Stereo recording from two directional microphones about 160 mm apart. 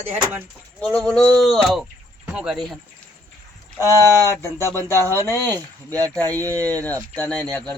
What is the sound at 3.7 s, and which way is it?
Speech, 20° left (ahead or behind).